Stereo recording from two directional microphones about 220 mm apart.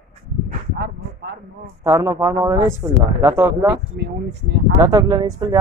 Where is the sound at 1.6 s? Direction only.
15° right (ahead or behind).